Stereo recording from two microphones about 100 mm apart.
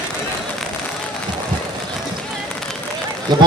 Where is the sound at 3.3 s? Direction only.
45° right (ahead or behind).